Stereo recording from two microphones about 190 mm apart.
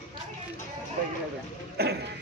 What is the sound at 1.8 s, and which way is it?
Speech, 55° right (ahead or behind).